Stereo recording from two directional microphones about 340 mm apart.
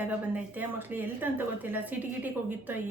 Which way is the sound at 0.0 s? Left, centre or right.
Centre.